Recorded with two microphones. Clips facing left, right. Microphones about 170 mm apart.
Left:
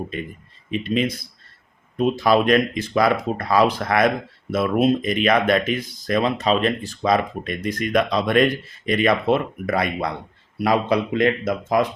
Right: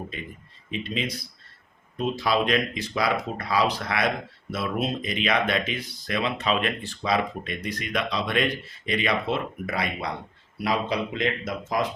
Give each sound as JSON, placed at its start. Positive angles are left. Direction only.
{"t": 0.7, "sound": "speech", "side_deg": 50}